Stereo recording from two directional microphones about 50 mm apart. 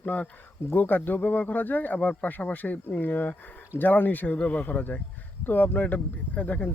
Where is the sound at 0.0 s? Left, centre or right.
Left.